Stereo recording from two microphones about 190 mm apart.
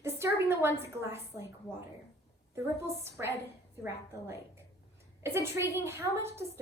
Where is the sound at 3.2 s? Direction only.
15° right (ahead or behind).